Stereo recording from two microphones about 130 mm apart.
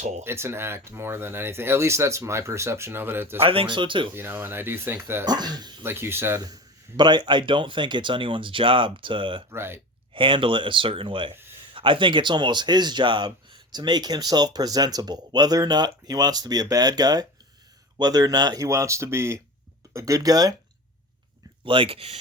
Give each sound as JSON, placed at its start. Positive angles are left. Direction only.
{"t": 0.0, "sound": "speech", "side_deg": -60}
{"t": 0.3, "sound": "speech", "side_deg": -20}
{"t": 3.4, "sound": "speech", "side_deg": -45}
{"t": 4.1, "sound": "speech", "side_deg": -15}
{"t": 5.2, "sound": "speech", "side_deg": -30}
{"t": 5.8, "sound": "speech", "side_deg": -20}
{"t": 6.5, "sound": "speech", "side_deg": -35}
{"t": 9.5, "sound": "speech", "side_deg": -20}
{"t": 10.2, "sound": "speech", "side_deg": -40}
{"t": 21.6, "sound": "speech", "side_deg": -40}